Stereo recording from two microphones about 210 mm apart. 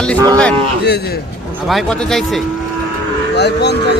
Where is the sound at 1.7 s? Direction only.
Centre (ahead or behind).